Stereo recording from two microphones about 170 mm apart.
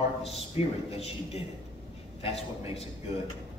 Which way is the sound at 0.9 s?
35° left (ahead or behind).